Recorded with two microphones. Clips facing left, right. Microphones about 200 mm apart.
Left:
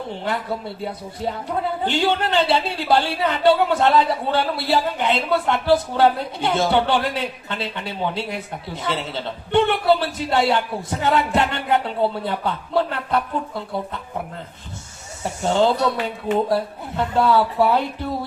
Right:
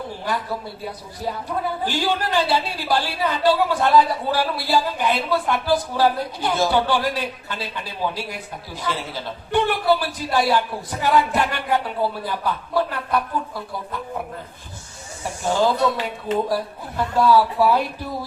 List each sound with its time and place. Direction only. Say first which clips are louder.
1.8 s a woman's voice: left 5 dB; 25° left (ahead or behind)
15.2 s a woman's voice: left 2 dB; 25° left (ahead or behind)